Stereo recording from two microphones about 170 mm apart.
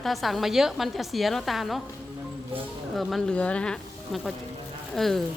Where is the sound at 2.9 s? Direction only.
Centre (ahead or behind).